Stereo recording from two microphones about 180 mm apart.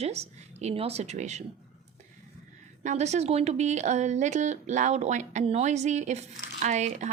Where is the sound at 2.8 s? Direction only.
40° right (ahead or behind).